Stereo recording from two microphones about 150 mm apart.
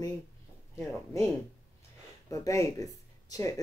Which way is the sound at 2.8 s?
25° left (ahead or behind).